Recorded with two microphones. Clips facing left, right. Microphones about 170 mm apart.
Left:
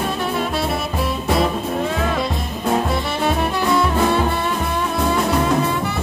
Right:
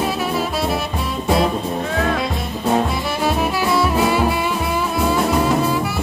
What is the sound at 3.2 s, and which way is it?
Music, centre (ahead or behind).